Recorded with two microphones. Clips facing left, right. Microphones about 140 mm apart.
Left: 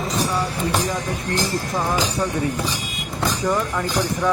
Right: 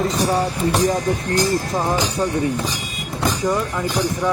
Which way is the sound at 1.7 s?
20° right (ahead or behind).